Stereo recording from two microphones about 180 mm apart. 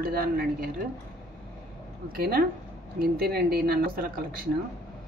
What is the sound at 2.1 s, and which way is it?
Speech, 55° right (ahead or behind).